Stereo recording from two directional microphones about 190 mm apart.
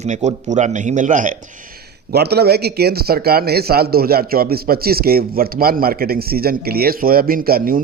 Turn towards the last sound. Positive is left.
turn(degrees=-50)  # may be behind; listen again after turning